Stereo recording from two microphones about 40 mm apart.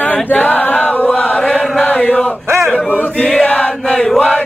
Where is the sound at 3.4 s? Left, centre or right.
Left.